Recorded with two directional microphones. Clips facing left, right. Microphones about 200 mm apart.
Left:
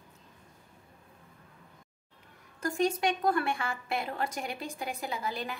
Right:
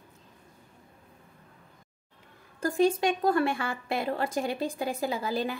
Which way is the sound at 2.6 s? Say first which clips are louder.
Right 4 dB; 30° right (ahead or behind).